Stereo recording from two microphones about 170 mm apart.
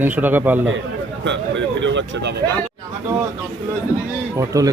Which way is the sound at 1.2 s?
90° right.